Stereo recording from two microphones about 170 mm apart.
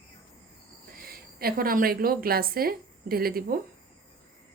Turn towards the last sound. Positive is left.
turn(degrees=-60)  # may be behind; listen again after turning